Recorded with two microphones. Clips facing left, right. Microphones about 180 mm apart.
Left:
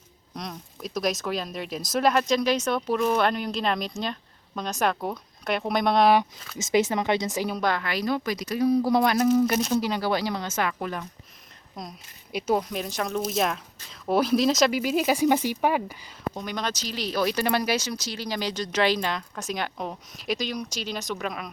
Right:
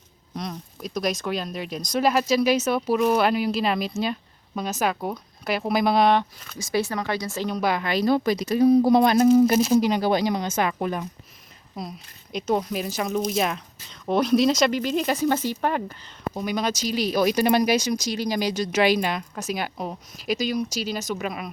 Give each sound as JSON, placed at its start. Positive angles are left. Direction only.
{"t": 0.3, "sound": "speech", "side_deg": 0}
{"t": 6.6, "sound": "speech", "side_deg": 20}
{"t": 7.5, "sound": "speech", "side_deg": -10}
{"t": 7.8, "sound": "a woman's voice", "side_deg": -25}
{"t": 9.6, "sound": "speech", "side_deg": -5}
{"t": 9.8, "sound": "speech", "side_deg": -20}
{"t": 11.8, "sound": "speech", "side_deg": -5}
{"t": 12.3, "sound": "speech", "side_deg": 10}
{"t": 16.3, "sound": "speech", "side_deg": -10}